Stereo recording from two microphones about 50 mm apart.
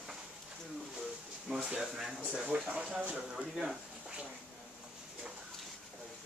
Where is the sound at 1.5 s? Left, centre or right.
Centre.